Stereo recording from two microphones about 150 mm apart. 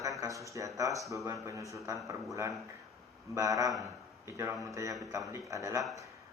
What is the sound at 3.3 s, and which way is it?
Speech, 20° right (ahead or behind).